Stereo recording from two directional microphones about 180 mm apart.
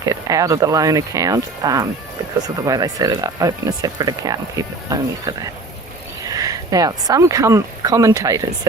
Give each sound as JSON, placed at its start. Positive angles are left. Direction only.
{"t": 0.0, "sound": "speech", "side_deg": -20}